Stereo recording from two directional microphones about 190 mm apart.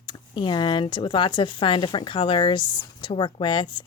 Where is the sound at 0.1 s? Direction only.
25° left (ahead or behind).